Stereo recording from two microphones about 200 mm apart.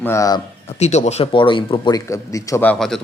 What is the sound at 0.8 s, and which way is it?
A man's voice, 35° left (ahead or behind).